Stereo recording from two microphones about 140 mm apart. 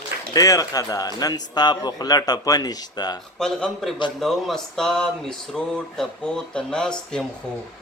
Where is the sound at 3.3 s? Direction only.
Centre (ahead or behind).